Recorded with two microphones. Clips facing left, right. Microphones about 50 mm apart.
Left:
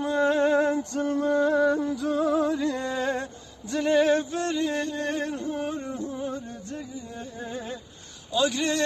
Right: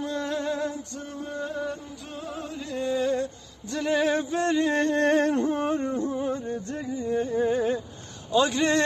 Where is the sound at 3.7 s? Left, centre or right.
Centre.